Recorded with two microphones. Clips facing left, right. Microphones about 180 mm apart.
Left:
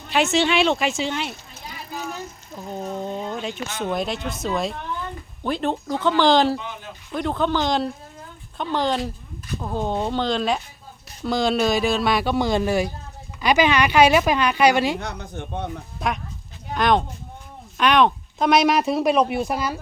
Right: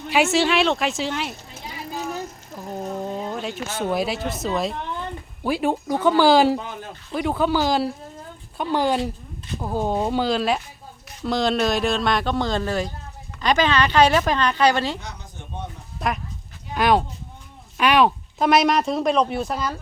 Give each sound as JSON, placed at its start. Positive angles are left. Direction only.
{"t": 0.1, "sound": "speech", "side_deg": -5}
{"t": 2.6, "sound": "cat", "side_deg": -5}
{"t": 3.8, "sound": "speech", "side_deg": -5}
{"t": 14.9, "sound": "speech", "side_deg": 60}
{"t": 16.0, "sound": "speech", "side_deg": 0}
{"t": 16.7, "sound": "a sound", "side_deg": -5}
{"t": 17.7, "sound": "speech", "side_deg": -5}